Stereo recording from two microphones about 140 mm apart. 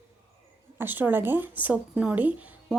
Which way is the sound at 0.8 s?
15° right (ahead or behind).